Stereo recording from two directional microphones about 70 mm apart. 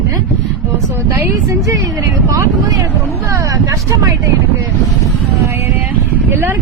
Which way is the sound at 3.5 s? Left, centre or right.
Right.